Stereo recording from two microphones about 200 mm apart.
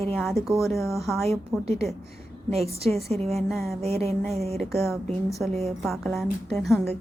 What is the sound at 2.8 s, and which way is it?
Speech, 5° left (ahead or behind).